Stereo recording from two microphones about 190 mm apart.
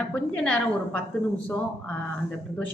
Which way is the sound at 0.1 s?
5° left (ahead or behind).